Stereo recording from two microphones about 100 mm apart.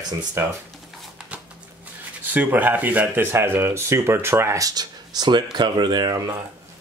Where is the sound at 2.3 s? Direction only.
20° right (ahead or behind); by 6.3 s 40° right (ahead or behind).